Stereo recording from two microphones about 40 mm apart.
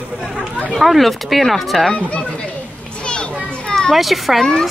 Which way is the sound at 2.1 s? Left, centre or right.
Left.